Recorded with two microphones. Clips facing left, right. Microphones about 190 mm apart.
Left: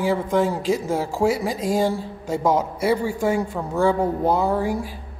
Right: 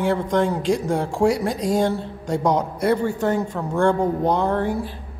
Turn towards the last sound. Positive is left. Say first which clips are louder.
# even
turn(degrees=10)  # may be behind; listen again after turning